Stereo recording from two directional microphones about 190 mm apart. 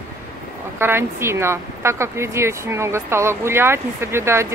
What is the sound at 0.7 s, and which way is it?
Speech, 10° right (ahead or behind).